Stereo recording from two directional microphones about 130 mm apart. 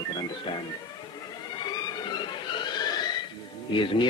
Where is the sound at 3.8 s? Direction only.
40° left (ahead or behind).